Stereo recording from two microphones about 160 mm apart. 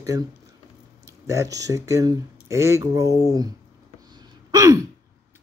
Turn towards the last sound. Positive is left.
turn(degrees=-20)  # may be behind; listen again after turning